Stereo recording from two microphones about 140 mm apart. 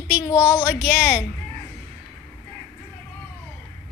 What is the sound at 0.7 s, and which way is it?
Speech, 5° right (ahead or behind).